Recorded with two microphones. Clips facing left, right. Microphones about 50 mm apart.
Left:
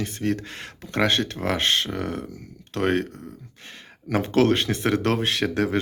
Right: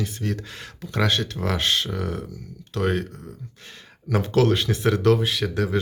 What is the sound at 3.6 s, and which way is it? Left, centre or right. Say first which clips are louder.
Speech: left 1 dB; left.